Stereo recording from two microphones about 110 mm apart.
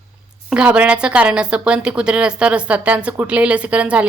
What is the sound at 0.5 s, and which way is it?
A woman's voice, 10° right (ahead or behind).